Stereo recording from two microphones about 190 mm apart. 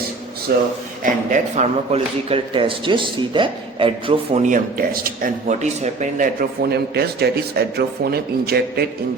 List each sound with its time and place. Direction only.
1.0 s a man's voice: 40° right (ahead or behind)
4.4 s a man's voice: 45° right (ahead or behind)
6.6 s speech: 55° right (ahead or behind)